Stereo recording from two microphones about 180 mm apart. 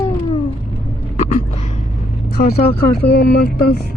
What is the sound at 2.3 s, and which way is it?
Speech, 55° left (ahead or behind).